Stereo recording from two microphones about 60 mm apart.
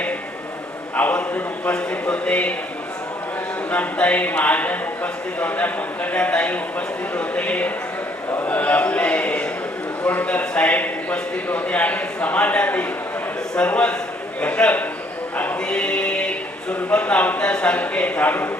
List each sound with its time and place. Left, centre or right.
0.9 s a man's voice: left
3.7 s a man's voice: left
8.4 s a sound: left
10.1 s a man's voice: left
15.6 s choir: centre
16.9 s a man's voice: left